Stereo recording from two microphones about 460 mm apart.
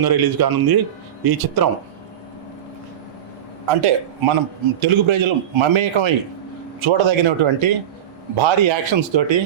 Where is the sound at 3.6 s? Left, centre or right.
Right.